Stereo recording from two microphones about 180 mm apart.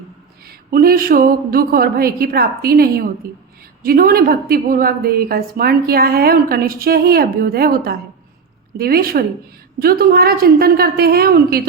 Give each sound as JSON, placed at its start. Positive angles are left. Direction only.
{"t": 0.4, "sound": "a woman's voice", "side_deg": -55}